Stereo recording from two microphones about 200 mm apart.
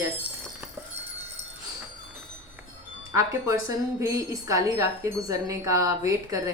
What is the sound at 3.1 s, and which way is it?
A woman's voice, 15° right (ahead or behind).